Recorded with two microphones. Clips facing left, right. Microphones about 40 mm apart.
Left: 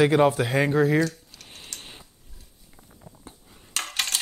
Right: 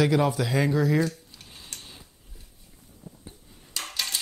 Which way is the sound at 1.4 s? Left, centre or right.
Left.